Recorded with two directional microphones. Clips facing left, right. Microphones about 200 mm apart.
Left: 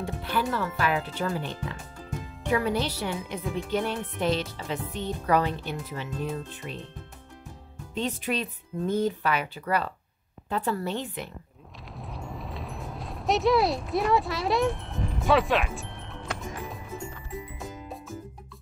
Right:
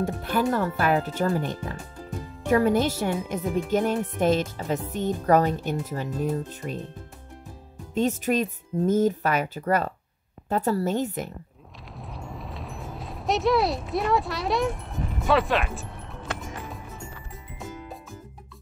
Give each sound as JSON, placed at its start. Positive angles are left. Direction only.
{"t": 0.0, "sound": "speech", "side_deg": -45}
{"t": 7.9, "sound": "speech", "side_deg": -45}
{"t": 11.9, "sound": "a sound", "side_deg": 0}